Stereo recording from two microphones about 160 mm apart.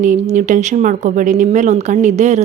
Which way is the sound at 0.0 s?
50° right (ahead or behind).